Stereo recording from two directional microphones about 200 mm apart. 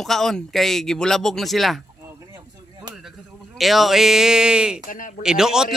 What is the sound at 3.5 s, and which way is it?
Speech, centre (ahead or behind).